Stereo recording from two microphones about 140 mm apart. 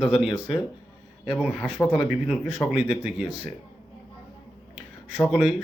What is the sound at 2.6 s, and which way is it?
Speech, 10° left (ahead or behind).